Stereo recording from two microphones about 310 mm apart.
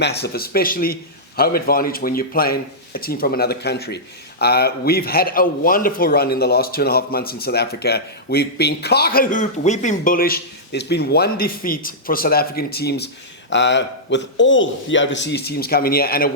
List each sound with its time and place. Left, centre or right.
0.0 s a man's voice: left